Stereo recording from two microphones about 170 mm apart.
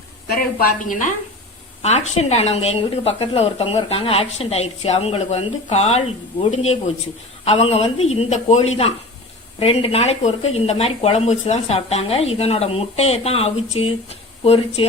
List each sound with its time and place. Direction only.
0.6 s a woman's voice: 50° left (ahead or behind)
1.8 s speech: 40° left (ahead or behind)